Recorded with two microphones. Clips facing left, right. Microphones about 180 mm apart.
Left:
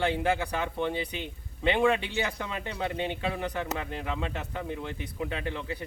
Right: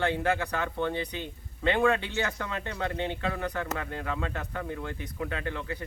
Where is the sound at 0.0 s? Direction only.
20° left (ahead or behind).